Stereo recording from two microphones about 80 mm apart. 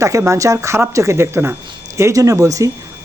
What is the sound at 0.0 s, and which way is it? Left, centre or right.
Speech, right.